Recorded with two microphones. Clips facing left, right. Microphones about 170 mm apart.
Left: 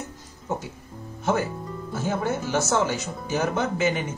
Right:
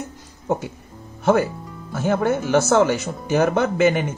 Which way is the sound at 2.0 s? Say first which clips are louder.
Right 7 dB; 60° right (ahead or behind).